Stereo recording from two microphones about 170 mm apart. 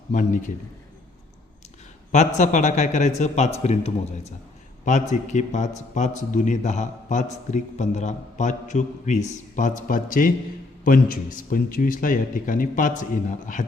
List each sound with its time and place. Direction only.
0.1 s a man's voice: 45° left (ahead or behind)
2.1 s a man's voice: 45° left (ahead or behind)